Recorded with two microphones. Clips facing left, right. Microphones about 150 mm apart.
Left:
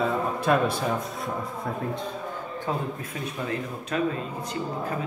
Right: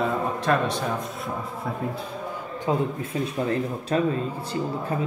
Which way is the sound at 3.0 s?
30° right (ahead or behind).